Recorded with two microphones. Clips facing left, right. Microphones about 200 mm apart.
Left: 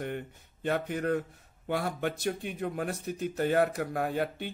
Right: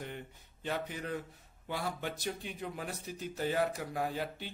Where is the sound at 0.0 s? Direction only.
55° left (ahead or behind).